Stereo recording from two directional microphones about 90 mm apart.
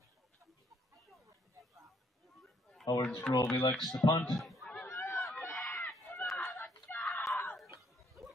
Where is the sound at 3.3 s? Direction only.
25° left (ahead or behind).